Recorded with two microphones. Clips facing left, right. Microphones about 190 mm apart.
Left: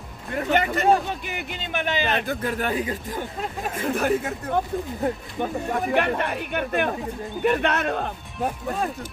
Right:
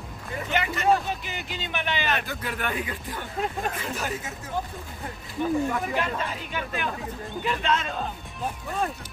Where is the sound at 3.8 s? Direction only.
55° left (ahead or behind).